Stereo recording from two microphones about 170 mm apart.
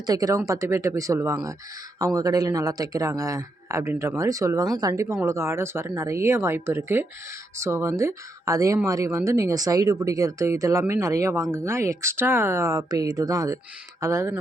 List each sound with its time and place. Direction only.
0.0 s speech: 20° right (ahead or behind)